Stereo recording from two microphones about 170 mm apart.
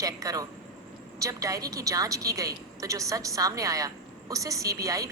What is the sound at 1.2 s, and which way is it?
A woman's voice, 20° right (ahead or behind).